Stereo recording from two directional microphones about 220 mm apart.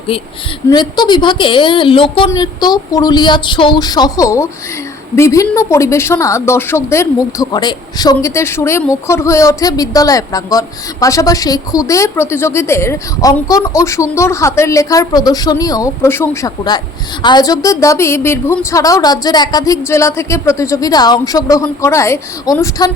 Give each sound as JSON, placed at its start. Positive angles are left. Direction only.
{"t": 0.7, "sound": "a woman's voice", "side_deg": 20}